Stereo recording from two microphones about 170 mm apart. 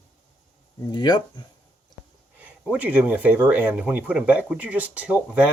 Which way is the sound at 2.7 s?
10° right (ahead or behind).